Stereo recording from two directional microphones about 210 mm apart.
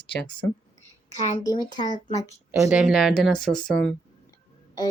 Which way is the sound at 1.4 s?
20° left (ahead or behind).